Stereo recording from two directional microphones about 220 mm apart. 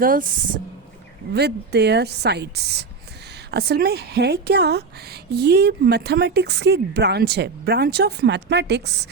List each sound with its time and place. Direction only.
0.0 s speech: 40° right (ahead or behind)